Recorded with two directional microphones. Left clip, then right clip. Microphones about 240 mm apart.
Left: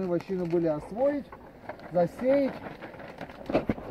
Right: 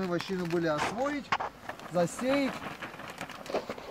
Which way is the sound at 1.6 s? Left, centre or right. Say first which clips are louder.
Left 9 dB; right.